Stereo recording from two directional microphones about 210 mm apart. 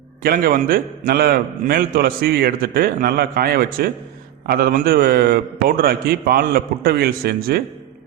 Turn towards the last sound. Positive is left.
turn(degrees=-45)  # may be behind; listen again after turning